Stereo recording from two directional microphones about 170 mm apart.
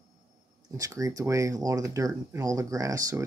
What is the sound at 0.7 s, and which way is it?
Speech, 20° right (ahead or behind).